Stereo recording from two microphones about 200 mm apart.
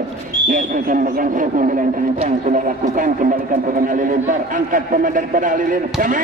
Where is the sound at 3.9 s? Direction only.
40° right (ahead or behind).